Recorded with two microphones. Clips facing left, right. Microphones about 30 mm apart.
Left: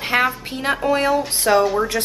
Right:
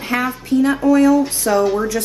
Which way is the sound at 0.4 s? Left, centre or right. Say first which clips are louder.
Right 6 dB; left.